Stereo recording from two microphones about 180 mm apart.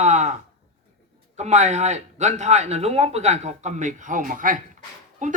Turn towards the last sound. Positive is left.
turn(degrees=-45)  # may be behind; listen again after turning